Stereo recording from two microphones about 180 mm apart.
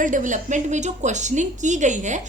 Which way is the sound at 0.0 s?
45° right (ahead or behind).